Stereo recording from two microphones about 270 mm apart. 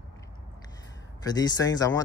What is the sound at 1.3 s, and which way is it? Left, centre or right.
Speech, centre.